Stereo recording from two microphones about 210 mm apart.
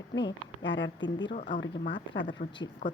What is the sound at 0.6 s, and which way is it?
Speech, 60° left (ahead or behind).